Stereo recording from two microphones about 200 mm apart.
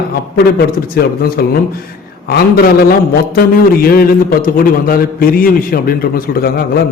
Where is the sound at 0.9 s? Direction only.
50° left (ahead or behind).